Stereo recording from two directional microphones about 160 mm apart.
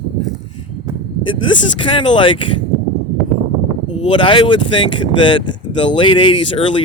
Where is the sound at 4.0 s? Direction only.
30° left (ahead or behind).